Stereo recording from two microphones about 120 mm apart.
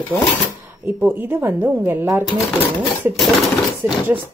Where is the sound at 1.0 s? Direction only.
15° right (ahead or behind).